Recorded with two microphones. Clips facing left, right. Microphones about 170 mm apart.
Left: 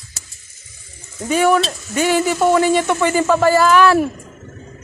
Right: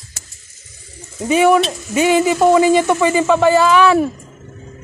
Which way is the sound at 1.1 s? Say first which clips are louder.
Right 3 dB; 10° right (ahead or behind).